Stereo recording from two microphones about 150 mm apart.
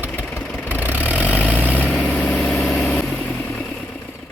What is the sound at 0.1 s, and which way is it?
Vehicle, 10° left (ahead or behind).